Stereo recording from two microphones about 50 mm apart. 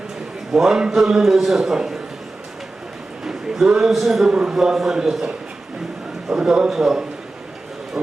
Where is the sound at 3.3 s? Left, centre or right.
Centre.